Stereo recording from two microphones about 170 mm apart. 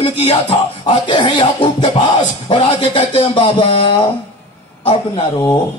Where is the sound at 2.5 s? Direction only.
30° left (ahead or behind).